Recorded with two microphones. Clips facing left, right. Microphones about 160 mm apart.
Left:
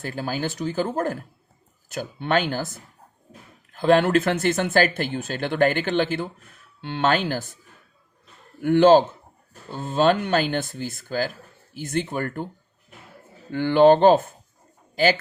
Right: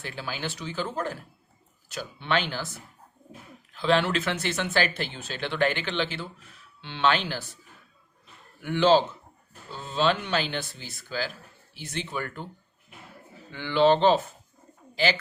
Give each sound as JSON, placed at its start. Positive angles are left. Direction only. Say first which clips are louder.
{"t": 0.0, "sound": "speech", "louder": "left 7 dB", "side_deg": 45}
{"t": 8.6, "sound": "speech", "louder": "left 6 dB", "side_deg": 50}
{"t": 13.5, "sound": "speech", "louder": "left 6 dB", "side_deg": 50}